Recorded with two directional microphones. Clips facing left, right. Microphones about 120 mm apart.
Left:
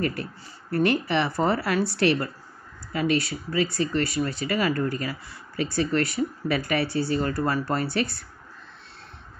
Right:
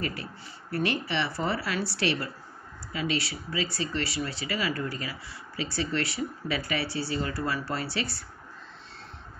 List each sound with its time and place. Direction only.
0.0 s speech: 50° left (ahead or behind)